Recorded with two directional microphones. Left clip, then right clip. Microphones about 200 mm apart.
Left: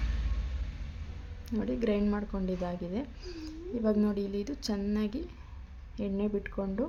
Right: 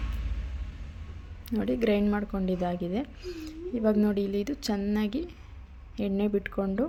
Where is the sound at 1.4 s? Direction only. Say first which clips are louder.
Right 5 dB; 20° right (ahead or behind).